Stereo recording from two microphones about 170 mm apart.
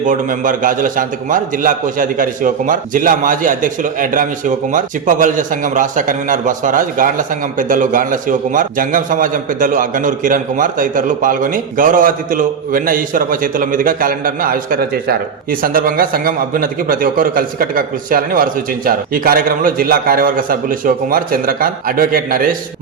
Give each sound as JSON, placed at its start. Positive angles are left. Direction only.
{"t": 0.0, "sound": "a man's voice", "side_deg": -50}